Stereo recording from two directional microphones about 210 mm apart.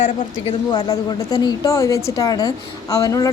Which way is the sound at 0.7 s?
15° left (ahead or behind).